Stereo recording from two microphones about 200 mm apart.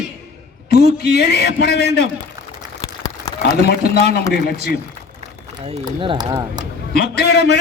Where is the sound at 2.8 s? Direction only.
20° left (ahead or behind).